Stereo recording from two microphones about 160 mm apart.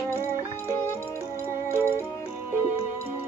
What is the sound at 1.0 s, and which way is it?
Music, 15° right (ahead or behind).